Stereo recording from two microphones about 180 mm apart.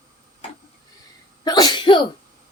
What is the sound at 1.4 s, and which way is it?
Sneeze, 20° left (ahead or behind).